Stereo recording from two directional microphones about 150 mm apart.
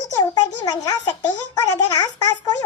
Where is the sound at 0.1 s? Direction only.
25° left (ahead or behind).